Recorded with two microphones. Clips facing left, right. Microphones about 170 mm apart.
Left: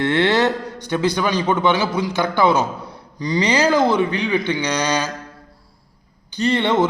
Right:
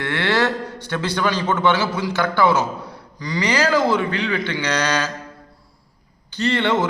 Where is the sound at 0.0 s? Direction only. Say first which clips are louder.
Left 4 dB; 20° left (ahead or behind).